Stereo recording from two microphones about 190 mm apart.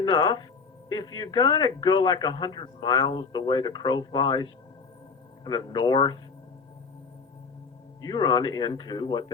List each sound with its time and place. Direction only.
0.0 s speech: 25° left (ahead or behind)
8.0 s speech: 20° left (ahead or behind)